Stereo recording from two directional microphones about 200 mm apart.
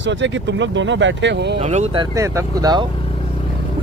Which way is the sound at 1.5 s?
35° right (ahead or behind).